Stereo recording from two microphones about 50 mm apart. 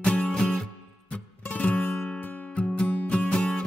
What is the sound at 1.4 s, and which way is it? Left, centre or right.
Music, left.